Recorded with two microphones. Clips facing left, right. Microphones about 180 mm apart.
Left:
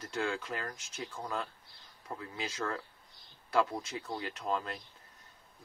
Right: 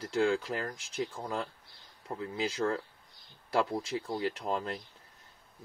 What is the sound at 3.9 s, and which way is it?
Speech, 30° right (ahead or behind).